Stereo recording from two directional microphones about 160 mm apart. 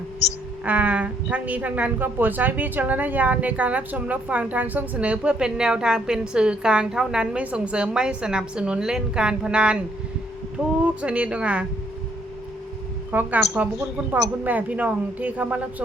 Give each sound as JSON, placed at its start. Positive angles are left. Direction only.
{"t": 0.6, "sound": "a woman's voice", "side_deg": -10}
{"t": 10.8, "sound": "a woman's voice", "side_deg": -10}
{"t": 13.1, "sound": "a woman's voice", "side_deg": -10}